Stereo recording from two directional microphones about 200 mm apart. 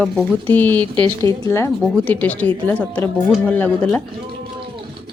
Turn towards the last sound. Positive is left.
turn(degrees=5)  # may be behind; listen again after turning